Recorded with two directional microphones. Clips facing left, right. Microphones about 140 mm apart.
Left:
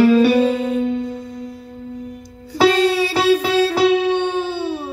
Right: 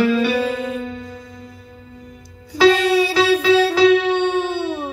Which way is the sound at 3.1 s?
40° left (ahead or behind).